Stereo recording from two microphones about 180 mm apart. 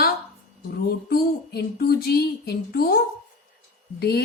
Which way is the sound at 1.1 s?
60° left (ahead or behind).